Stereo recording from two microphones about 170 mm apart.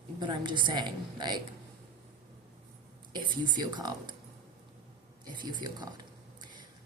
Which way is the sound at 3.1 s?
25° right (ahead or behind).